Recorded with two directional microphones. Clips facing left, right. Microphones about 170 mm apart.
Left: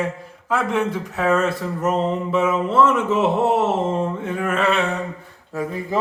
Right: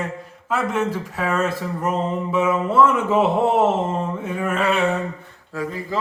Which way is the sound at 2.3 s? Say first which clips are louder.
Right 1 dB; 5° right (ahead or behind).